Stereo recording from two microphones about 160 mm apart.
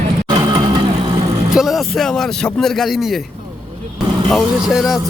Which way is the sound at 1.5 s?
Centre (ahead or behind).